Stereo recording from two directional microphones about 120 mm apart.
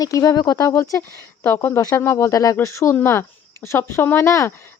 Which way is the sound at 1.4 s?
15° left (ahead or behind).